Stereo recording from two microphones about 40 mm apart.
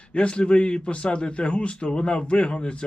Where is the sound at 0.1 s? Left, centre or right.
Left.